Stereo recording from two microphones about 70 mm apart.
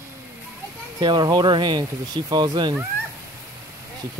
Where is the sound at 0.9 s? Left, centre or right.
Right.